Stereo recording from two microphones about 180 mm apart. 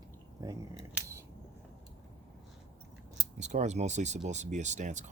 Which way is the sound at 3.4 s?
40° right (ahead or behind).